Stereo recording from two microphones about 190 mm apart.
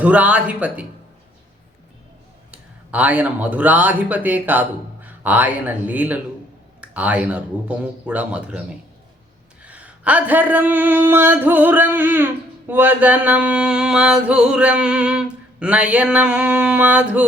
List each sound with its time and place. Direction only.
0.0 s speech: 5° right (ahead or behind)
2.5 s speech: 5° right (ahead or behind)
9.6 s speech: 5° right (ahead or behind)